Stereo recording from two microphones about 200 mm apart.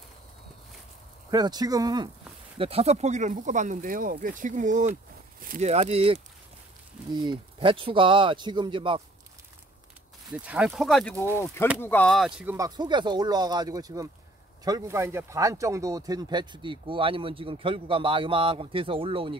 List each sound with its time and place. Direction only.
1.3 s speech: 20° right (ahead or behind)
2.6 s speech: 30° right (ahead or behind)
10.4 s speech: 5° right (ahead or behind)
11.1 s speech: 10° left (ahead or behind); by 12.5 s 5° right (ahead or behind)
12.5 s speech: 20° right (ahead or behind)